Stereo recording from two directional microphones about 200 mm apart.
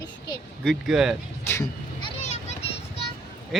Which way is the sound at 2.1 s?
35° left (ahead or behind).